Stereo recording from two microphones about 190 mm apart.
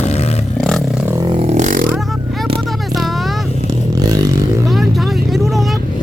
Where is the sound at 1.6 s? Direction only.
45° right (ahead or behind).